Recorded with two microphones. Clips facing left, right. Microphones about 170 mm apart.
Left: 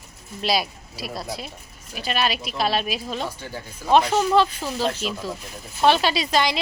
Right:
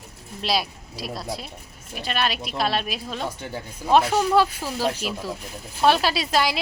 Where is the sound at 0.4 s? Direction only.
Centre (ahead or behind).